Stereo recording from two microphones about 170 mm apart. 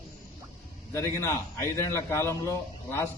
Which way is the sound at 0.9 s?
15° left (ahead or behind).